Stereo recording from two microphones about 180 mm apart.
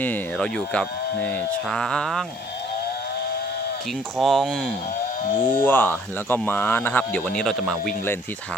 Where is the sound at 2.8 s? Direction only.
60° left (ahead or behind).